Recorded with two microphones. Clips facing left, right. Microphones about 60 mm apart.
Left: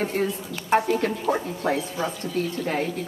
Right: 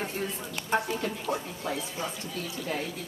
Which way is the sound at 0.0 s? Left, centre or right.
Left.